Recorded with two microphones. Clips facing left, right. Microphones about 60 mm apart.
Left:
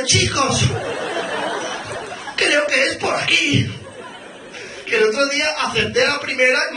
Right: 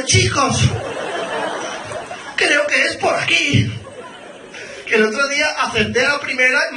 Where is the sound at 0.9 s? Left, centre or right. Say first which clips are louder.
Even; left.